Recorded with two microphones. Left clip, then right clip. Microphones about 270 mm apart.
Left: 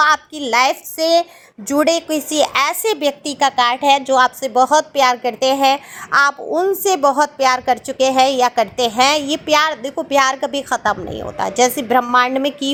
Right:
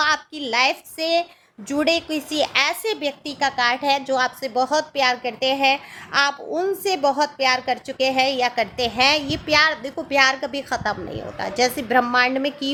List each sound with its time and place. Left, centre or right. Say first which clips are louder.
0.0 s a woman's voice: left 6 dB; centre